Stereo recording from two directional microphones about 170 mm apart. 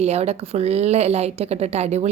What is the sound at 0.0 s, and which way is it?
A woman's voice, 40° right (ahead or behind).